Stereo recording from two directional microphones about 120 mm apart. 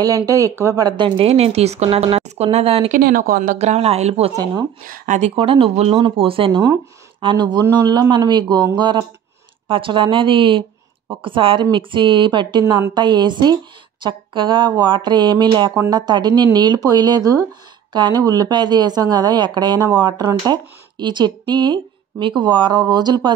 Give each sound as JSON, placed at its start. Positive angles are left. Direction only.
{"t": 0.0, "sound": "a woman's voice", "side_deg": -30}
{"t": 3.5, "sound": "a woman's voice", "side_deg": -65}
{"t": 5.0, "sound": "a woman's voice", "side_deg": -90}
{"t": 5.3, "sound": "speech", "side_deg": -50}